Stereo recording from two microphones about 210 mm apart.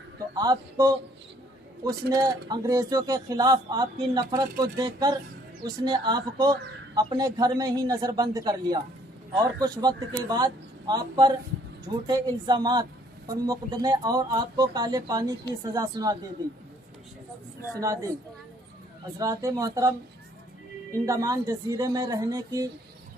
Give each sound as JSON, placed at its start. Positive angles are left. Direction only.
{"t": 0.3, "sound": "speech", "side_deg": -15}
{"t": 17.7, "sound": "speech", "side_deg": -15}
{"t": 19.2, "sound": "speech", "side_deg": -15}
{"t": 21.1, "sound": "speech", "side_deg": -15}